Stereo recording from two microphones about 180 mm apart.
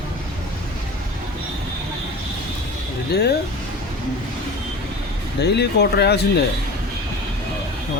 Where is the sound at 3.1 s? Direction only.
65° left (ahead or behind).